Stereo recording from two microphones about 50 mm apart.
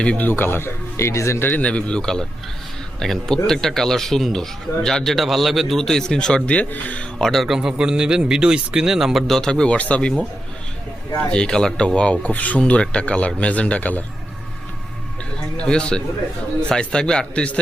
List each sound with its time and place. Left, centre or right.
0.2 s a man's voice: left
1.4 s speech: left
1.6 s a man's voice: left
7.2 s speech: centre
7.4 s speech: centre
9.2 s speech: centre
9.5 s a man's voice: centre
11.2 s a man's voice: centre
15.5 s a man's voice: centre